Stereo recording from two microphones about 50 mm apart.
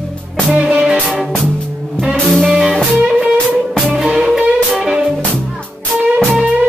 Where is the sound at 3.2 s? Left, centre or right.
Centre.